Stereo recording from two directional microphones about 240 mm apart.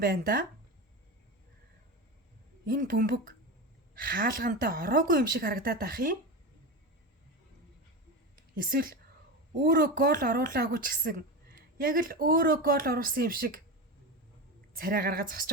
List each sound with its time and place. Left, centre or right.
0.0 s a woman's voice: right
2.6 s a woman's voice: right
8.4 s a woman's voice: right
14.8 s a woman's voice: right